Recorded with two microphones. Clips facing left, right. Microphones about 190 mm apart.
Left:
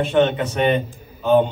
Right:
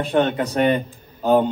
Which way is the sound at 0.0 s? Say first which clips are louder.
Left 2 dB; 35° right (ahead or behind).